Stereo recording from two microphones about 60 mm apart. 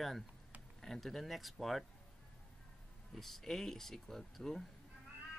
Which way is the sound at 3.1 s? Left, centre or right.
Centre.